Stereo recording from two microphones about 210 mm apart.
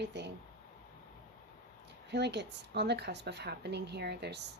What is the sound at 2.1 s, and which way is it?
Speech, 55° right (ahead or behind).